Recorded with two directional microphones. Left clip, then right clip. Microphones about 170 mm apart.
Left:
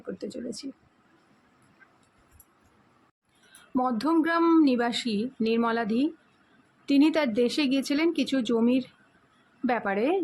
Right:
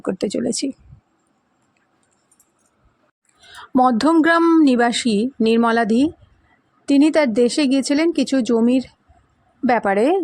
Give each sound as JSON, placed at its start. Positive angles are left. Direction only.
{"t": 0.1, "sound": "speech", "side_deg": -50}
{"t": 3.8, "sound": "speech", "side_deg": -45}
{"t": 4.4, "sound": "speech", "side_deg": -35}